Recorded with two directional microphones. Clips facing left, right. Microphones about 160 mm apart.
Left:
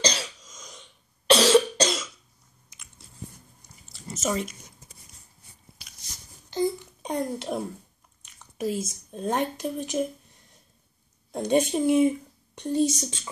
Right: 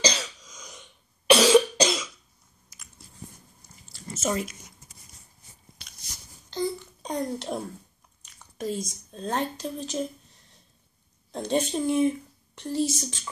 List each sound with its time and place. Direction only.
0.0 s cough: centre (ahead or behind)
0.6 s a sound: 5° right (ahead or behind)
1.3 s cough: 5° right (ahead or behind)
3.8 s chewing: centre (ahead or behind)
6.5 s a sound: 10° left (ahead or behind)
8.3 s speech: 5° left (ahead or behind)
11.3 s a woman's voice: 15° left (ahead or behind)